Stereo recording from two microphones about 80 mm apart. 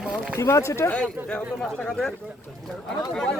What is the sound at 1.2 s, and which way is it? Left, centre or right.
Speech, centre.